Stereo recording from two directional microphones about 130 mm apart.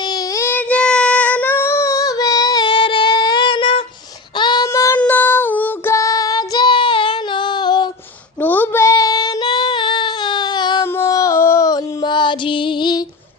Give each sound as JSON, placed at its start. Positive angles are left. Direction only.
{"t": 0.3, "sound": "child singing", "side_deg": 15}
{"t": 4.6, "sound": "child singing", "side_deg": 25}
{"t": 8.4, "sound": "child singing", "side_deg": 15}
{"t": 10.9, "sound": "female singing", "side_deg": 25}